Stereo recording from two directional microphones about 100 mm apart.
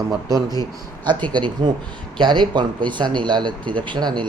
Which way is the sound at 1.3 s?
50° right (ahead or behind).